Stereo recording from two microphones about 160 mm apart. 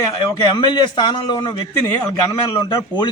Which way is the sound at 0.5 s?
25° left (ahead or behind).